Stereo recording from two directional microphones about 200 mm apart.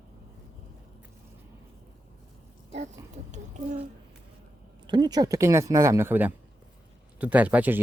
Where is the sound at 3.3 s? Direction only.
35° right (ahead or behind).